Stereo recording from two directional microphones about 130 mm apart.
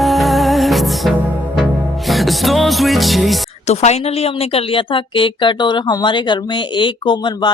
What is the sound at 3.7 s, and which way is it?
A woman's voice, 55° left (ahead or behind).